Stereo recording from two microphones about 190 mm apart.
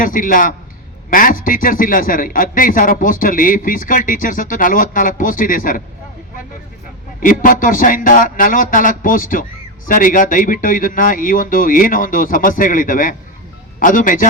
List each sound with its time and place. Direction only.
0.0 s speech: 45° left (ahead or behind)
7.2 s speech: 45° left (ahead or behind)